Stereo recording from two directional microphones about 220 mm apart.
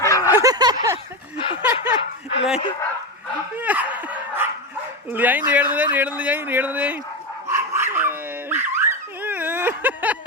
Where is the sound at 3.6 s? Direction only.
5° right (ahead or behind).